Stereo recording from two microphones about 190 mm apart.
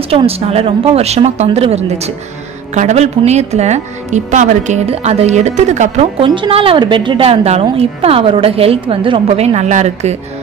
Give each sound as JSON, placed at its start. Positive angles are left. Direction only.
{"t": 0.1, "sound": "a woman's voice", "side_deg": -30}